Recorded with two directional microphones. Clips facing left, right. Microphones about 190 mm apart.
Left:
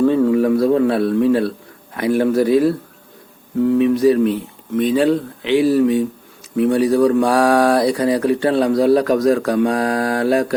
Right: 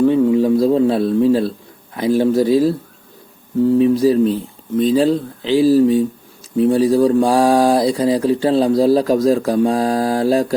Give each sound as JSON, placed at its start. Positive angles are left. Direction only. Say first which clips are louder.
{"t": 0.0, "sound": "a sound", "louder": "right 1 dB", "side_deg": -15}
{"t": 2.0, "sound": "speech", "louder": "right 1 dB", "side_deg": -30}
{"t": 3.7, "sound": "speech", "louder": "even", "side_deg": -35}